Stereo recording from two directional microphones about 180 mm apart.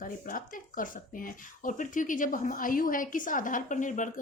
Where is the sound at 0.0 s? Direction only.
50° left (ahead or behind).